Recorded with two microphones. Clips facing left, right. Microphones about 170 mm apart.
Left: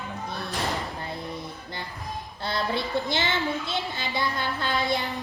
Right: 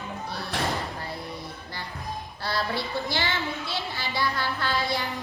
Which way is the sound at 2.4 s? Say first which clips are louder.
Left 1 dB; 20° left (ahead or behind).